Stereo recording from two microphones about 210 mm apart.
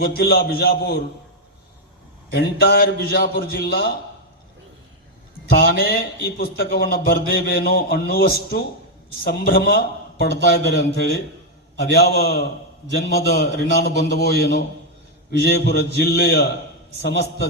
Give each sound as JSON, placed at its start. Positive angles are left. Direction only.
{"t": 0.0, "sound": "a man's voice", "side_deg": 50}
{"t": 2.3, "sound": "a man's voice", "side_deg": 50}
{"t": 5.5, "sound": "a man's voice", "side_deg": 45}